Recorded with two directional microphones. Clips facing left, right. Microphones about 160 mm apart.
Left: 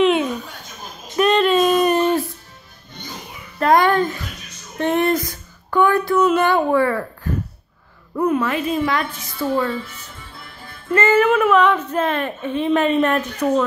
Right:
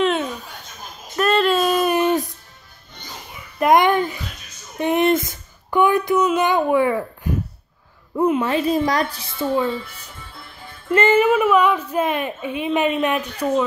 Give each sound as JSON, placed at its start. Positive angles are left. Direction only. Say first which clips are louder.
{"t": 0.0, "sound": "chuckle", "louder": "left 4 dB", "side_deg": 5}
{"t": 1.3, "sound": "a sound", "louder": "left 1 dB", "side_deg": -5}
{"t": 3.5, "sound": "babbling", "louder": "even", "side_deg": -15}
{"t": 4.7, "sound": "a sound", "louder": "right 1 dB", "side_deg": -15}
{"t": 6.3, "sound": "a woman's voice", "louder": "left 1 dB", "side_deg": -15}
{"t": 8.5, "sound": "a woman's voice", "louder": "right 2 dB", "side_deg": -35}
{"t": 9.4, "sound": "a woman's voice", "louder": "even", "side_deg": -15}
{"t": 11.0, "sound": "a woman's voice", "louder": "even", "side_deg": -25}
{"t": 11.2, "sound": "a woman's voice", "louder": "left 1 dB", "side_deg": -5}